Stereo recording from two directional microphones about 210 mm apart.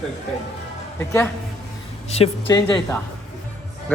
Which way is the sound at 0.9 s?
10° left (ahead or behind).